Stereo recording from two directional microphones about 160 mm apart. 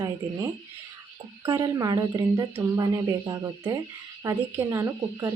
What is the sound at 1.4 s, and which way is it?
Speech, 20° right (ahead or behind).